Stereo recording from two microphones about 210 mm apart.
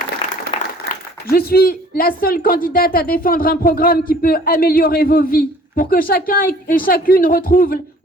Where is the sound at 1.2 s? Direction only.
45° left (ahead or behind).